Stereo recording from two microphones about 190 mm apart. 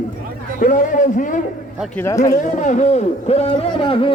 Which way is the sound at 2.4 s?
40° left (ahead or behind).